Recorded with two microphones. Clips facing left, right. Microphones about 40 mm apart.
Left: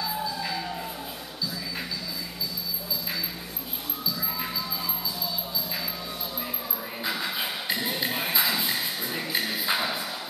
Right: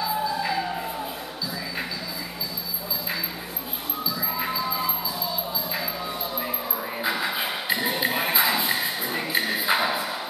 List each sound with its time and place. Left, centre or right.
0.0 s music: centre
4.4 s music: centre
7.0 s music: centre